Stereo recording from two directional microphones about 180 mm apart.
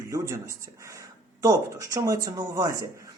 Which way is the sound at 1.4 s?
20° right (ahead or behind).